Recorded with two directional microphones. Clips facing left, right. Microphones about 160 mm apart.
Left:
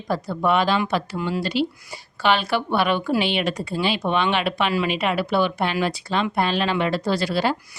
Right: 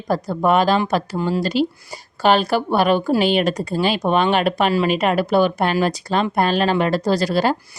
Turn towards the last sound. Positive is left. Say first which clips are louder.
# right 4 dB
turn(degrees=-45)  # may be behind; listen again after turning